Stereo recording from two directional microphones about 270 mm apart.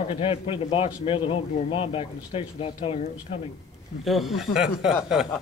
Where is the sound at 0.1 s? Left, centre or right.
Left.